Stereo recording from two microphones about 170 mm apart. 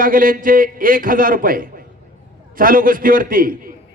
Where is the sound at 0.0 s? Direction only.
55° right (ahead or behind).